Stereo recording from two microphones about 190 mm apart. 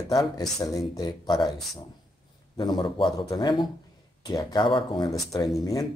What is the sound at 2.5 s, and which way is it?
Speech, 25° left (ahead or behind).